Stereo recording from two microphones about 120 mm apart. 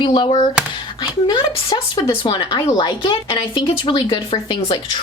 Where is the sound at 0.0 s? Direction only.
45° left (ahead or behind).